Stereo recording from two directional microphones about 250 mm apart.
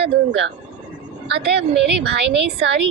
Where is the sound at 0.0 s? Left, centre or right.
Right.